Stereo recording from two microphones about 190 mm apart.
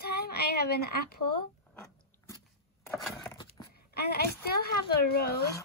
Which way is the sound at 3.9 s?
55° left (ahead or behind).